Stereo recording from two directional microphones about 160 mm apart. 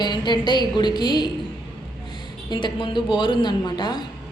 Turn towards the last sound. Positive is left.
turn(degrees=25)  # may be behind; listen again after turning